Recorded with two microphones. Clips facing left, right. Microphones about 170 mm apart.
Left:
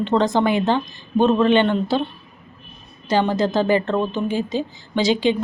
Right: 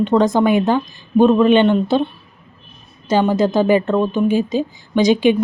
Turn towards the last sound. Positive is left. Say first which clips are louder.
# right 5 dB
turn(degrees=-15)  # may be behind; listen again after turning